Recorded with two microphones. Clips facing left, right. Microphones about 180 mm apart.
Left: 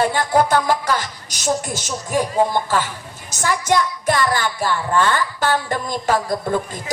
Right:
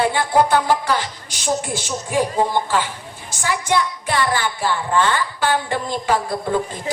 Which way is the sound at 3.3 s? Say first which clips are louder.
Left 2 dB; 40° left (ahead or behind).